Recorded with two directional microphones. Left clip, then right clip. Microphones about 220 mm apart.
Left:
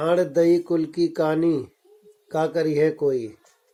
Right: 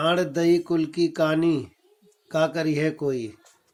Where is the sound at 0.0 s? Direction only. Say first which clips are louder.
Left 3 dB; 40° right (ahead or behind).